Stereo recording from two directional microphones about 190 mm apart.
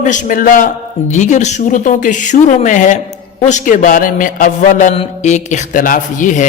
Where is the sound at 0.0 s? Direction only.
40° left (ahead or behind).